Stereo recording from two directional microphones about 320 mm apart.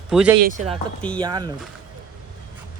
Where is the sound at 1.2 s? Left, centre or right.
Centre.